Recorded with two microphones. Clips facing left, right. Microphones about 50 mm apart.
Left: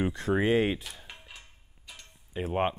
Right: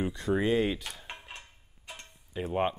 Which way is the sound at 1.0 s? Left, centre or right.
Right.